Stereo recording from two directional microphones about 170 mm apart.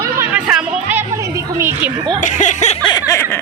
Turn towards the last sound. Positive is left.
turn(degrees=15)  # may be behind; listen again after turning